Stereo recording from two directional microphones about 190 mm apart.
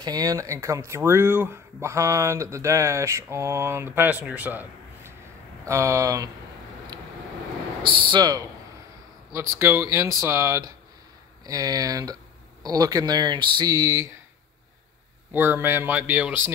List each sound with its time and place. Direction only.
0.0 s speech: 20° right (ahead or behind)
7.8 s speech: 25° right (ahead or behind)
15.3 s speech: 10° right (ahead or behind)